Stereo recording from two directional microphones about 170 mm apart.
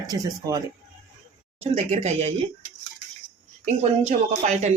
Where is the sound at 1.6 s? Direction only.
35° right (ahead or behind).